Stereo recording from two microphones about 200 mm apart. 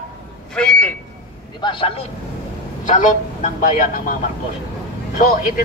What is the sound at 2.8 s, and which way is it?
A man's voice, 40° left (ahead or behind).